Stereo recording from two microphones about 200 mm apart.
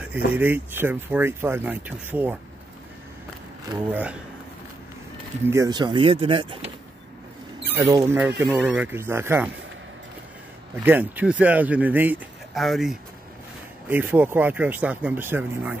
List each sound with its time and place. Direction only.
0.3 s speech: 10° right (ahead or behind)
3.9 s speech: 5° right (ahead or behind)
5.5 s speech: 20° right (ahead or behind)
7.7 s speech: 15° right (ahead or behind)
10.8 s speech: 10° right (ahead or behind)